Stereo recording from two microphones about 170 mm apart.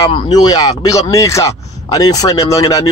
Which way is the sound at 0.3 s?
20° left (ahead or behind).